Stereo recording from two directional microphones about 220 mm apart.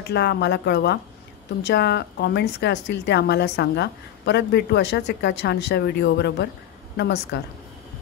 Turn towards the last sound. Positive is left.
turn(degrees=50)  # may be behind; listen again after turning